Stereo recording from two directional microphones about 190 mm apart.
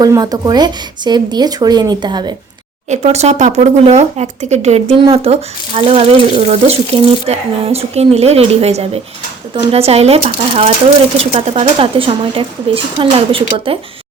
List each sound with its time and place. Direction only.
0.0 s speech: 20° right (ahead or behind)
2.9 s speech: 35° right (ahead or behind)